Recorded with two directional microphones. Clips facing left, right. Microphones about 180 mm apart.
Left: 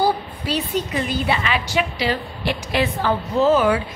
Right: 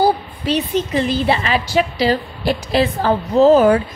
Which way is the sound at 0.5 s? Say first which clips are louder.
Right 5 dB; 20° right (ahead or behind).